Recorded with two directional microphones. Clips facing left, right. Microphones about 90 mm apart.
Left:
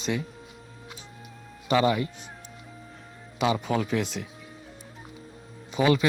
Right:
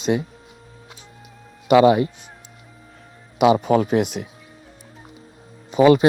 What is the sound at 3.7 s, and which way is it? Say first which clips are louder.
Speech: right 9 dB; 45° right (ahead or behind).